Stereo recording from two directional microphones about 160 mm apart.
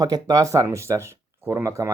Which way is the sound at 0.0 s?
20° right (ahead or behind).